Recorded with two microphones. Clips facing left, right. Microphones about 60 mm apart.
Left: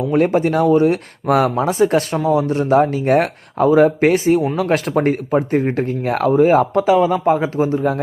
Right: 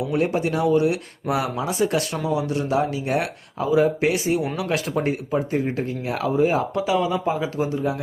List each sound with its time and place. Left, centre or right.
0.0 s speech: left